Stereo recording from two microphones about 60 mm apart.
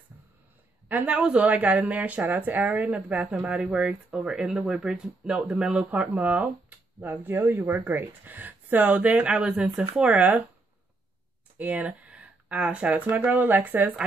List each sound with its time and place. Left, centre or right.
1.0 s speech: centre
3.5 s speech: centre
5.9 s speech: right
7.0 s speech: right
11.5 s speech: right